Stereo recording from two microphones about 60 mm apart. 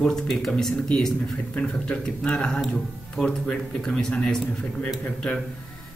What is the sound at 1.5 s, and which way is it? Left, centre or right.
Speech, centre.